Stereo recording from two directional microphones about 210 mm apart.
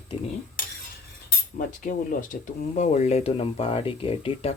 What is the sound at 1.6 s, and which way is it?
Speech, 40° left (ahead or behind).